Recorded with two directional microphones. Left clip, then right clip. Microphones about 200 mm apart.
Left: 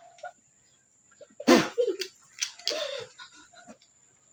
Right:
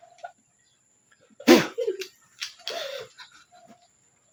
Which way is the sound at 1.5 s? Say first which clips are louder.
Right 3 dB; 30° right (ahead or behind).